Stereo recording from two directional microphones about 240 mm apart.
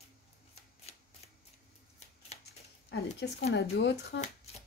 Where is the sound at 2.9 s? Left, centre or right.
Left.